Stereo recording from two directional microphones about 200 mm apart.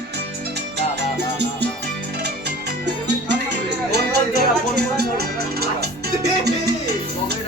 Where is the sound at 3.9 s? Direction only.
55° right (ahead or behind).